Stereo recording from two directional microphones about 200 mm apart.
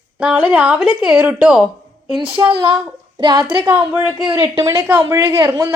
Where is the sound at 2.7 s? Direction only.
20° right (ahead or behind).